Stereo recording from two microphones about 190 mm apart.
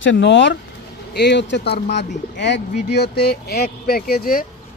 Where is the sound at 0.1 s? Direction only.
70° left (ahead or behind); by 4.5 s 50° left (ahead or behind).